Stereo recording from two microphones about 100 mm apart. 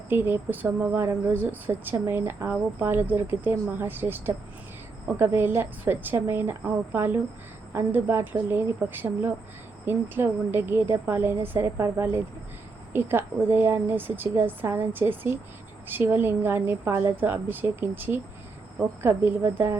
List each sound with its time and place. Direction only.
0.1 s speech: 20° right (ahead or behind)